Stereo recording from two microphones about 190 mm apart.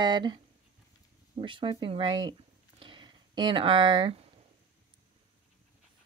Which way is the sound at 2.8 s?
25° right (ahead or behind).